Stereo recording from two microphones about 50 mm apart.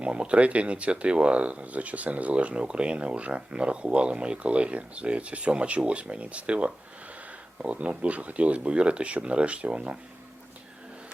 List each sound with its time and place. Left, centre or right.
0.0 s speech: right